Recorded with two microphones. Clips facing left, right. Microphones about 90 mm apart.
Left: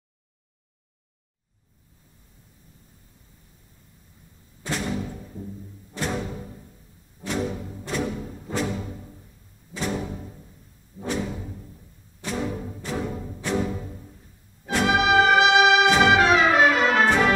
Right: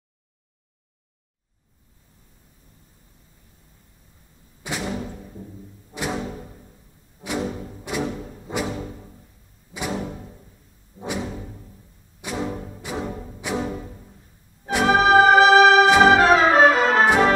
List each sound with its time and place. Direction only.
4.6 s music: 10° right (ahead or behind)
5.9 s music: 10° right (ahead or behind)
9.8 s music: 10° right (ahead or behind)
14.9 s music: 35° right (ahead or behind)
16.0 s brass instrument: 35° right (ahead or behind)